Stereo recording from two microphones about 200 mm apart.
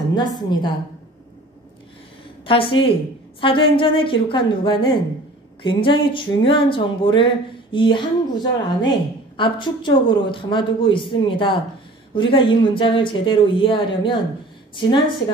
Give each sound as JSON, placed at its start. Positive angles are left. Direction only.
{"t": 0.1, "sound": "a woman's voice", "side_deg": 20}
{"t": 2.4, "sound": "a woman's voice", "side_deg": 25}